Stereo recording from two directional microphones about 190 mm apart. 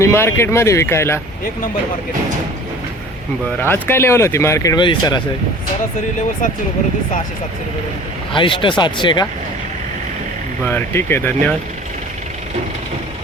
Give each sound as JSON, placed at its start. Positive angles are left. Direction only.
{"t": 0.0, "sound": "speech", "side_deg": 15}
{"t": 3.6, "sound": "speech", "side_deg": 10}
{"t": 8.3, "sound": "speech", "side_deg": 25}
{"t": 10.6, "sound": "speech", "side_deg": 10}